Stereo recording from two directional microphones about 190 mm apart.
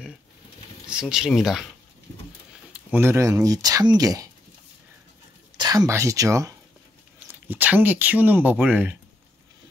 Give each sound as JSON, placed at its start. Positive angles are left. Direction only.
{"t": 0.8, "sound": "speech", "side_deg": -5}
{"t": 2.9, "sound": "speech", "side_deg": -15}
{"t": 5.6, "sound": "speech", "side_deg": -20}